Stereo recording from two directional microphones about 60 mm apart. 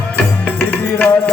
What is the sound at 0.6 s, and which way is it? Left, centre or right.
Music, left.